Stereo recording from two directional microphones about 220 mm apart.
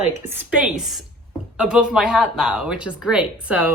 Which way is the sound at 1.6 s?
5° right (ahead or behind).